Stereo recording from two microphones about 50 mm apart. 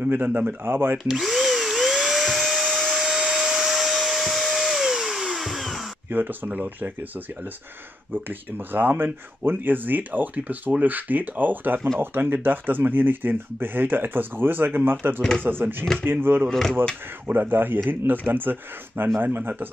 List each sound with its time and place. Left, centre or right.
0.0 s speech: right
0.7 s speech: right
0.9 s drill: centre
2.9 s hair dryer: centre
6.0 s speech: right
8.1 s speech: right
16.4 s speech: centre
17.3 s speech: right